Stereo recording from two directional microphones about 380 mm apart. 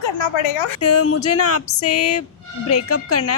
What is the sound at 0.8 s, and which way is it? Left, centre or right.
Speech, left.